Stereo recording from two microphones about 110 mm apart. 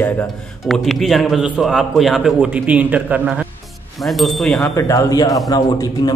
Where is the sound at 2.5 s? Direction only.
15° right (ahead or behind).